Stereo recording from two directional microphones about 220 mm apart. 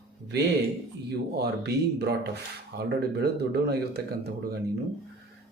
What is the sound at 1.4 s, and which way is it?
Speech, 45° right (ahead or behind).